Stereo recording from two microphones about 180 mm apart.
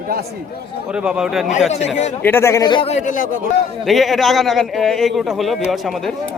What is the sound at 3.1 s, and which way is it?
Speech, 45° left (ahead or behind).